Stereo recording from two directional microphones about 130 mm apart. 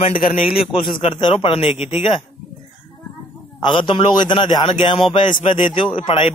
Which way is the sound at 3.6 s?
40° left (ahead or behind).